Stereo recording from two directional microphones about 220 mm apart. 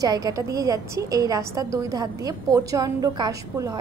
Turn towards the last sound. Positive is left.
turn(degrees=-15)  # may be behind; listen again after turning